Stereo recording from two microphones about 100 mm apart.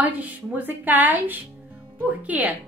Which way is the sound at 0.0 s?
15° right (ahead or behind).